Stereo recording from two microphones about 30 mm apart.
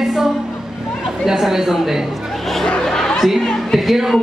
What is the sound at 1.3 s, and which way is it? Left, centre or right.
Speech, centre.